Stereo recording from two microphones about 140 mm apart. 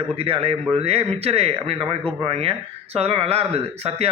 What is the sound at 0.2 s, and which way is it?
Speech, 45° right (ahead or behind).